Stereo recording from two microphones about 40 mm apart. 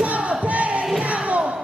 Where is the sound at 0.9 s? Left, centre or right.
Right.